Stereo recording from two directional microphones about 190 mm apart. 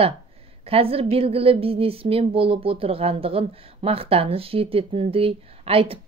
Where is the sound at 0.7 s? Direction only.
30° right (ahead or behind).